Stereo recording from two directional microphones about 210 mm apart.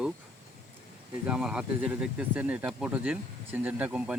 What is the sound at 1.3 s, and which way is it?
Speech, 5° right (ahead or behind).